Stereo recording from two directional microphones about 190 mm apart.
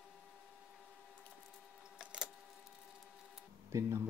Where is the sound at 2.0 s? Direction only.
5° right (ahead or behind).